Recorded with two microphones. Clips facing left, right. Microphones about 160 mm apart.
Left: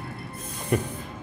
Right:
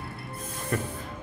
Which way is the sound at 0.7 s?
15° left (ahead or behind).